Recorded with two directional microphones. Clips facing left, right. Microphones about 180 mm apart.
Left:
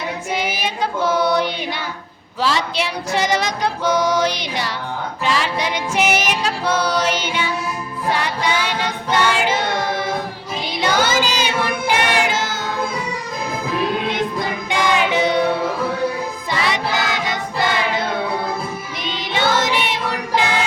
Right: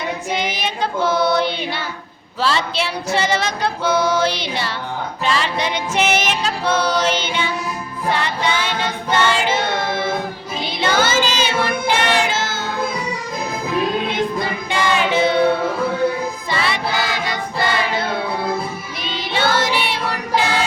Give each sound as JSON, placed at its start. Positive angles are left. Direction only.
{"t": 0.3, "sound": "child singing", "side_deg": 10}
{"t": 2.4, "sound": "female singing", "side_deg": 15}
{"t": 9.1, "sound": "child singing", "side_deg": 10}
{"t": 14.7, "sound": "female singing", "side_deg": 15}
{"t": 16.5, "sound": "choir", "side_deg": 15}
{"t": 19.0, "sound": "music", "side_deg": 20}